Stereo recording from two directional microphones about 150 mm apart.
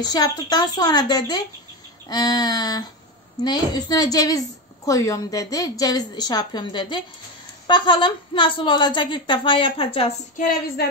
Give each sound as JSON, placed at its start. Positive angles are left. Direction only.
{"t": 0.0, "sound": "a woman's voice", "side_deg": 25}